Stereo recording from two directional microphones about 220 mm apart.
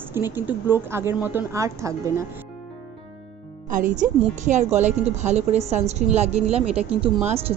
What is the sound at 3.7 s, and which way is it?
A woman's voice, 35° right (ahead or behind).